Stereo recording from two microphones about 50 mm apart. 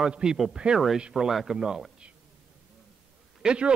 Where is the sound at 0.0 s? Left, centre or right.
Centre.